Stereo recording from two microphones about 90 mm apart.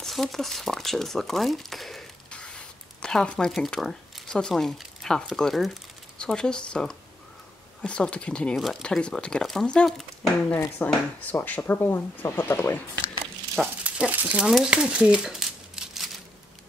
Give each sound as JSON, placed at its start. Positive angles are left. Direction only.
{"t": 0.0, "sound": "speech", "side_deg": 0}
{"t": 2.3, "sound": "a sound", "side_deg": 10}
{"t": 3.5, "sound": "speech", "side_deg": 0}
{"t": 10.5, "sound": "speech", "side_deg": 20}
{"t": 13.6, "sound": "a sound", "side_deg": -10}
{"t": 14.4, "sound": "speech", "side_deg": -5}